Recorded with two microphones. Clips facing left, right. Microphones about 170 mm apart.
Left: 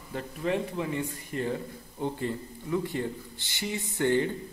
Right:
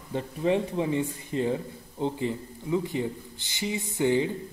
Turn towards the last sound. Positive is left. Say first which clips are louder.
# right 1 dB
turn(degrees=-15)  # may be behind; listen again after turning